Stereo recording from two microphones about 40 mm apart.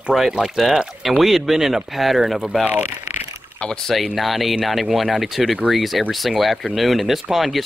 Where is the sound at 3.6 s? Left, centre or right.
Centre.